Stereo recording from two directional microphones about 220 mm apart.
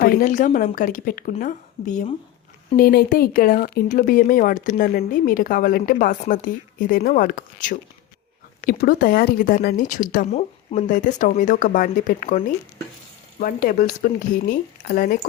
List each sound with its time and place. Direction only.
0.0 s speech: 40° left (ahead or behind)
13.4 s speech: 40° left (ahead or behind)